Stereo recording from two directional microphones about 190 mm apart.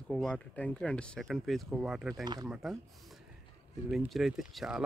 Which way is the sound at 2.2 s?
20° right (ahead or behind).